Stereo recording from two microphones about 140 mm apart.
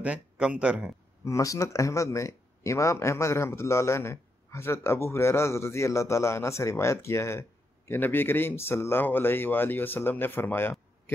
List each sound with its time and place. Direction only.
0.0 s speech: 10° right (ahead or behind)
1.2 s speech: 25° left (ahead or behind)